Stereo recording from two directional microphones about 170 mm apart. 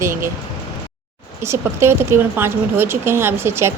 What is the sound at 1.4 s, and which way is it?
Speech, 15° right (ahead or behind).